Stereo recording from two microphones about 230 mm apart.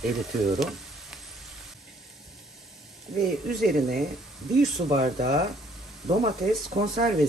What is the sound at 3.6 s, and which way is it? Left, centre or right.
Speech, right.